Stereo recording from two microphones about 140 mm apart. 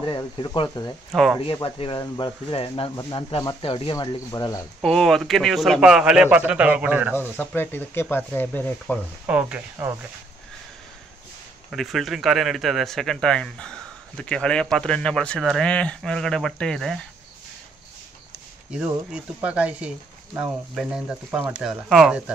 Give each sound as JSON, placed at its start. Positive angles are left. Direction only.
{"t": 0.0, "sound": "speech", "side_deg": 35}
{"t": 1.4, "sound": "speech", "side_deg": 40}
{"t": 4.8, "sound": "speech", "side_deg": 0}
{"t": 7.2, "sound": "speech", "side_deg": 15}
{"t": 9.3, "sound": "speech", "side_deg": -10}
{"t": 11.7, "sound": "speech", "side_deg": 0}
{"t": 18.7, "sound": "speech", "side_deg": -5}